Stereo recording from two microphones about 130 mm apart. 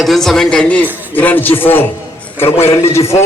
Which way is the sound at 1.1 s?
15° left (ahead or behind).